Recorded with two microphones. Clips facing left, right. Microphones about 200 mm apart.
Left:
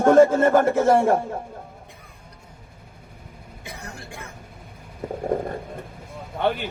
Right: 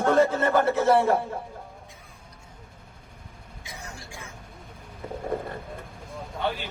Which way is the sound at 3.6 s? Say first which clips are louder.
Left 4 dB; 60° left (ahead or behind).